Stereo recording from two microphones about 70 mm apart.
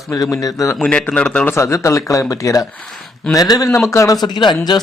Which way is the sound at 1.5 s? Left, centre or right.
Left.